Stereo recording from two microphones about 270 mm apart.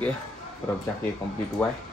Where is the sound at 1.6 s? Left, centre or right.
Centre.